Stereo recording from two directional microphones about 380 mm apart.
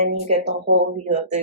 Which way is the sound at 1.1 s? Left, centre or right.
Centre.